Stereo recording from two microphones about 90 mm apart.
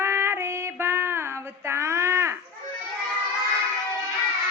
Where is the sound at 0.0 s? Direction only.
30° right (ahead or behind).